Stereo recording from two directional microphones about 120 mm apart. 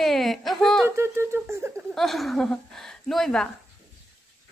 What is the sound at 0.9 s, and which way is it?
Speech, 20° right (ahead or behind).